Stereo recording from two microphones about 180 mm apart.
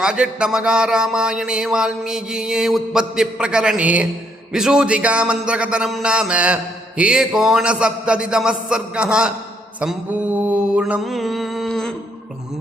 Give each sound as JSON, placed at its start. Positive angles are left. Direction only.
{"t": 0.0, "sound": "speech", "side_deg": -5}
{"t": 9.8, "sound": "mantra", "side_deg": -5}